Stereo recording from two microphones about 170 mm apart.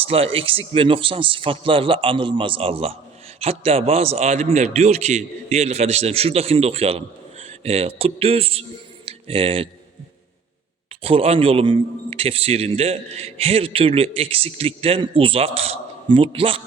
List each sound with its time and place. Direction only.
0.0 s a man's voice: 35° right (ahead or behind)
11.0 s a man's voice: 35° right (ahead or behind)